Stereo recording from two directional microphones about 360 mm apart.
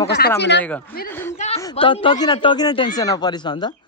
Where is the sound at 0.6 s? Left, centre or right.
Centre.